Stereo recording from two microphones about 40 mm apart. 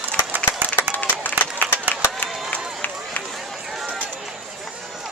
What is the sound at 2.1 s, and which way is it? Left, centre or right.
Run, left.